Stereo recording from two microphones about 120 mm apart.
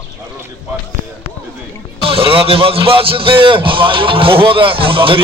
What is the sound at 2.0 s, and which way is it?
A man's voice, 50° right (ahead or behind).